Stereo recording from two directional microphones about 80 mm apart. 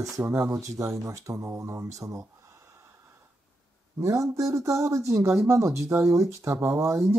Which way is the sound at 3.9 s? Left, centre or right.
Right.